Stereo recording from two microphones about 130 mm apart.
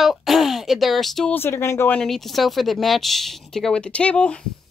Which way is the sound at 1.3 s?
20° left (ahead or behind).